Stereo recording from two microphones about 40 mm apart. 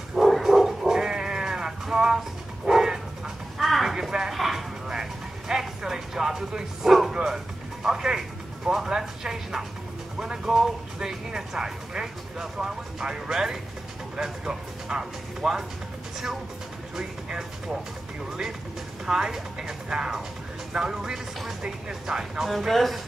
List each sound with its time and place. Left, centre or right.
0.1 s bow-wow: centre
0.8 s cat: centre
3.5 s a sound: centre
5.5 s music: centre
8.6 s bow-wow: centre
10.1 s music: centre
16.9 s vehicle: centre
19.0 s speech: centre
22.7 s speech: centre